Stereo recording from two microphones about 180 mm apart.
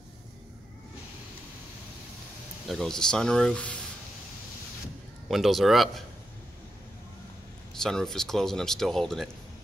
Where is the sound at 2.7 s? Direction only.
Centre (ahead or behind).